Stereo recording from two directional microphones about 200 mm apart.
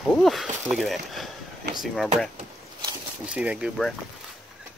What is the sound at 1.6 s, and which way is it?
Speech, 55° right (ahead or behind).